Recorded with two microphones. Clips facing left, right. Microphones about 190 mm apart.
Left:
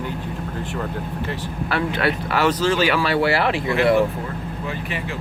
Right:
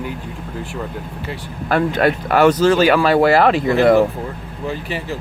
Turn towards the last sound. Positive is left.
turn(degrees=-40)  # may be behind; listen again after turning